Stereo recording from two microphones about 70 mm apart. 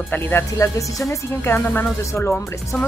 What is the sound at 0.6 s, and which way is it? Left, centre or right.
Speech, left.